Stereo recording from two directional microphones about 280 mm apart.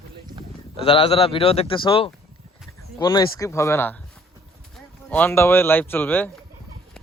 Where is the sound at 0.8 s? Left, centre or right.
Centre.